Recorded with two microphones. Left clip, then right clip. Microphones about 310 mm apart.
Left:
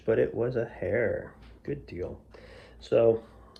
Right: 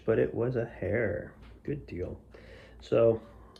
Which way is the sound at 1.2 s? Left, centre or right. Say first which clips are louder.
Even; centre.